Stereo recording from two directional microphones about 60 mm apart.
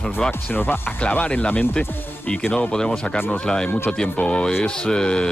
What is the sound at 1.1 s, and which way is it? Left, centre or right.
Speech, left.